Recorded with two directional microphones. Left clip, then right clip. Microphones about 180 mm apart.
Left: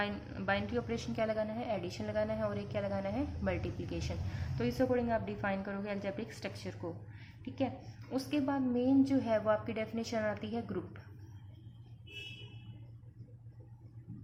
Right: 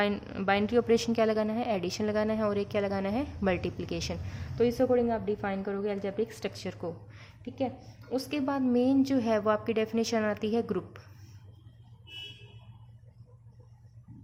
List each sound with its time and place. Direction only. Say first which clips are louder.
0.0 s a woman's voice: right 8 dB; 45° right (ahead or behind)
7.2 s a sound: right 3 dB; 30° right (ahead or behind)
8.1 s a woman's voice: right 4 dB; 35° right (ahead or behind)